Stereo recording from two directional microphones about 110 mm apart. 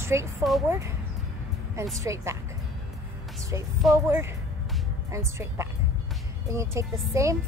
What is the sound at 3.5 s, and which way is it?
A woman's voice, 25° right (ahead or behind).